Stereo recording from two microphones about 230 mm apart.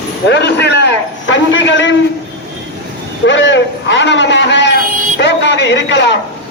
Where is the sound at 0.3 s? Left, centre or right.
Left.